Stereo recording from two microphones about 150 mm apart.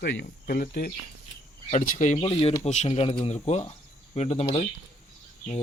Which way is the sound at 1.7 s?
55° left (ahead or behind).